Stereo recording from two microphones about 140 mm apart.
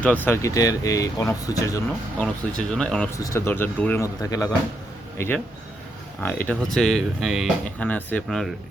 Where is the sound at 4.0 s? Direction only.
25° left (ahead or behind).